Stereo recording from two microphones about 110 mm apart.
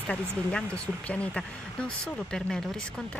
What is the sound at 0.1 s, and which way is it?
Speech, 10° left (ahead or behind).